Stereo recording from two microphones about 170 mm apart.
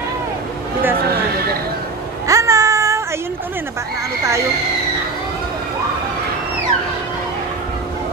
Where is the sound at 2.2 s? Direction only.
20° right (ahead or behind).